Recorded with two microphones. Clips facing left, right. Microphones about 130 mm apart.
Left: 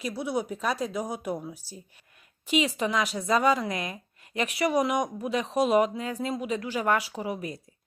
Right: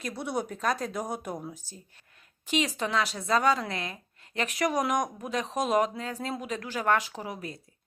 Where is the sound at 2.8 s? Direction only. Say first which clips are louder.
Left 2 dB; 10° left (ahead or behind).